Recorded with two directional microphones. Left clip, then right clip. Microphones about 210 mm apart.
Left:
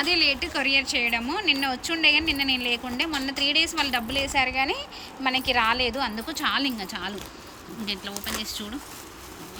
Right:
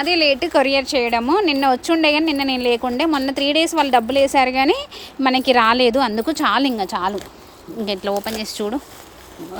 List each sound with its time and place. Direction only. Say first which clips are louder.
0.0 s a woman's voice: right 6 dB; 15° right (ahead or behind)